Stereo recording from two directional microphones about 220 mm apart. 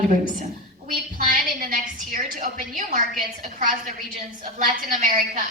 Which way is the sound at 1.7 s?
40° right (ahead or behind).